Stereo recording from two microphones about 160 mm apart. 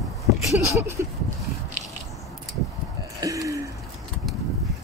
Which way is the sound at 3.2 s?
20° right (ahead or behind).